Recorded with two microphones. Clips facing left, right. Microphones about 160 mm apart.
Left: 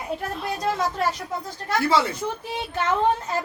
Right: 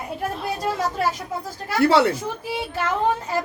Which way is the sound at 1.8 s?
65° right (ahead or behind).